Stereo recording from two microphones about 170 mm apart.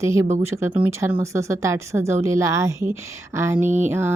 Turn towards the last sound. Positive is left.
turn(degrees=-15)  # may be behind; listen again after turning